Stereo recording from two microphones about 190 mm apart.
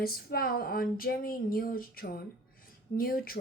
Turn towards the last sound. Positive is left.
turn(degrees=50)  # may be behind; listen again after turning